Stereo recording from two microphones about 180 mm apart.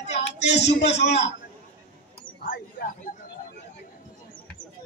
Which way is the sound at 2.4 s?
50° left (ahead or behind).